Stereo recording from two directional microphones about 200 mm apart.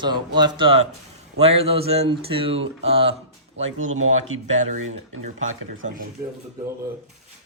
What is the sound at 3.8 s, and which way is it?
Speech, 85° right.